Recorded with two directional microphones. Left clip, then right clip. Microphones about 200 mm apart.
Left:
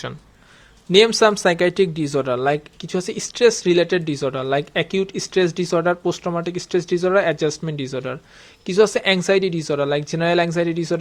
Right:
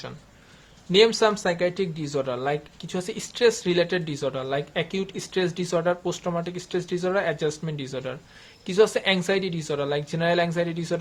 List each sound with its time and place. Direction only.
0.9 s speech: 35° left (ahead or behind)